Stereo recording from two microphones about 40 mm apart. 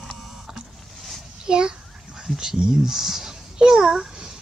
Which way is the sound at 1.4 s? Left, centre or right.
Right.